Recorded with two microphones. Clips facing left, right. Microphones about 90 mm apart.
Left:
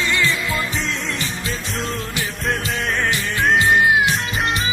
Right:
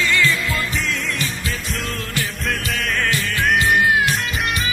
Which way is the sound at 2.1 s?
25° left (ahead or behind).